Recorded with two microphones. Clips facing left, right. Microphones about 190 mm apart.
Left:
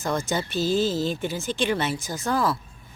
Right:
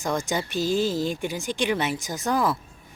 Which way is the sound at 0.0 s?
15° right (ahead or behind).